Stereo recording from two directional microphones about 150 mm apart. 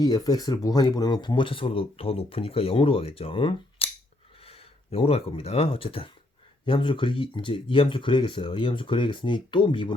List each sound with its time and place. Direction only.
0.0 s speech: 25° left (ahead or behind)